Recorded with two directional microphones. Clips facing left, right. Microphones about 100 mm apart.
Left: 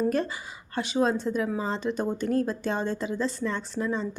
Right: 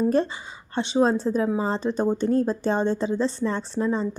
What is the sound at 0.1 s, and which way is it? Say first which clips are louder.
A woman's voice: right 5 dB; 30° right (ahead or behind).